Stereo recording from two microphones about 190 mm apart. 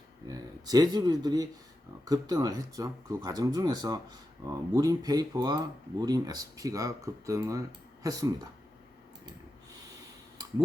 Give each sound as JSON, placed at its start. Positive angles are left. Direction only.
{"t": 0.3, "sound": "speech", "side_deg": -20}